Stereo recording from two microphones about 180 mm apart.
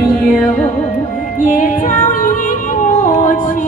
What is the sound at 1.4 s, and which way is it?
Music, 40° left (ahead or behind).